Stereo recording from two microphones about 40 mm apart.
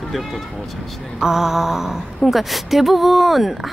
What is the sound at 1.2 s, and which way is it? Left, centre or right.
Speech, centre.